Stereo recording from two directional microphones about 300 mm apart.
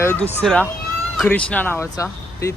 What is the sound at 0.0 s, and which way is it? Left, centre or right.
Speech, centre.